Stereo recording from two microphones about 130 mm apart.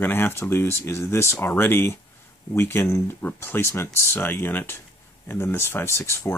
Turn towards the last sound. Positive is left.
turn(degrees=20)  # may be behind; listen again after turning